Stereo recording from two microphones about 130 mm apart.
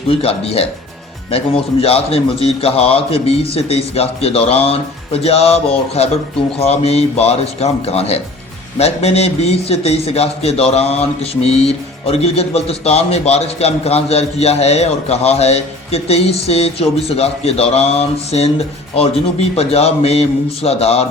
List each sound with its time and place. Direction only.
0.1 s a man's voice: 45° left (ahead or behind)
1.8 s a man's voice: 50° left (ahead or behind)
19.5 s a man's voice: 50° left (ahead or behind)